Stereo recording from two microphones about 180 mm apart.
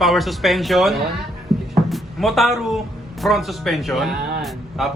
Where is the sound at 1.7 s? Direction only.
Centre (ahead or behind).